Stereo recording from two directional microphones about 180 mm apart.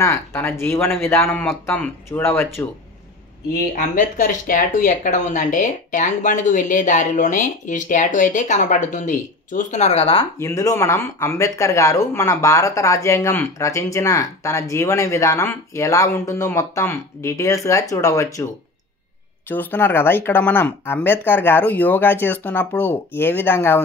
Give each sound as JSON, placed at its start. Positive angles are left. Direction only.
{"t": 0.0, "sound": "speech", "side_deg": 15}
{"t": 3.5, "sound": "speech", "side_deg": 45}
{"t": 10.4, "sound": "speech", "side_deg": 15}
{"t": 19.5, "sound": "speech", "side_deg": 10}